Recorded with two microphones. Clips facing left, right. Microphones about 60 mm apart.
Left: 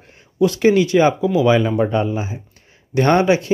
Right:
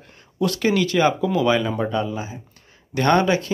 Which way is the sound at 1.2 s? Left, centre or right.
Centre.